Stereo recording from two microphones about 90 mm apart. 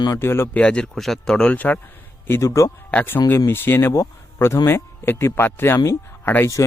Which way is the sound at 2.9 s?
20° left (ahead or behind).